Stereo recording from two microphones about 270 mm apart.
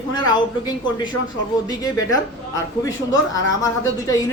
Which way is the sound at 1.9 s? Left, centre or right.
Centre.